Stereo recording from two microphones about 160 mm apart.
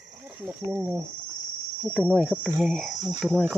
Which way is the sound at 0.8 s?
10° right (ahead or behind).